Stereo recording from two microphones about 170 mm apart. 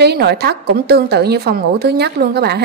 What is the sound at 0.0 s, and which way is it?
A woman's voice, 75° right (ahead or behind).